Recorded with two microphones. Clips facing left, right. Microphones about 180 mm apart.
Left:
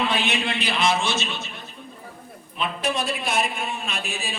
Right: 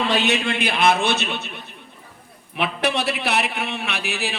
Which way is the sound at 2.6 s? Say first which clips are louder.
Right 3 dB; 70° right (ahead or behind).